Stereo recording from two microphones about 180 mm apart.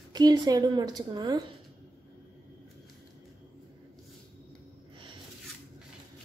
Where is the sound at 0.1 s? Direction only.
20° right (ahead or behind).